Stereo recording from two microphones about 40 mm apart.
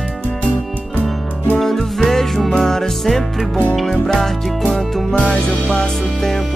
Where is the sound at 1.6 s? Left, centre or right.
Centre.